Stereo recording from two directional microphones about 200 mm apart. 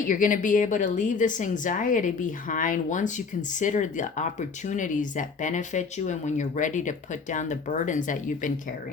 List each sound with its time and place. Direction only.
0.1 s speech: 40° left (ahead or behind)